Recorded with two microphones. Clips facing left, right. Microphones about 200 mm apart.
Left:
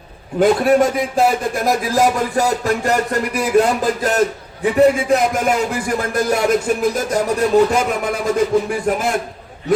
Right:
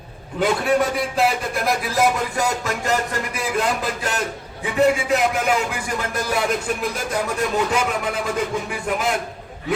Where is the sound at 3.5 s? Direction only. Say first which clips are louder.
Left 9 dB; 40° left (ahead or behind).